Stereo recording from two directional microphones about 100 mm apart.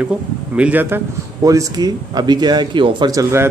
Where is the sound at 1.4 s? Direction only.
35° right (ahead or behind).